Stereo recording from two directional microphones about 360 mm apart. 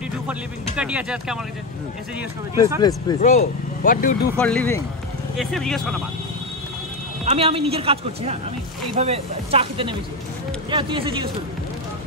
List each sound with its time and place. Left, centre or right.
0.3 s speech: centre
3.1 s speech: centre
4.4 s speech: centre
7.2 s a man's voice: centre